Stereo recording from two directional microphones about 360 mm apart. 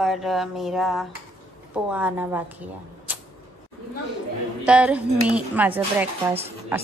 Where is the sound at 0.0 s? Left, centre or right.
Centre.